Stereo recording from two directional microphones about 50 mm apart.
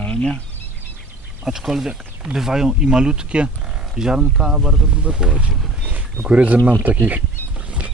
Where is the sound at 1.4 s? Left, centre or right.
Centre; by 6.6 s right.